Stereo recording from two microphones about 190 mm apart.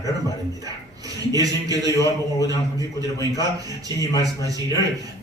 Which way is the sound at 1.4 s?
20° right (ahead or behind).